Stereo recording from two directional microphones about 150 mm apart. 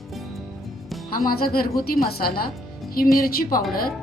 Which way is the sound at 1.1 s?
80° left.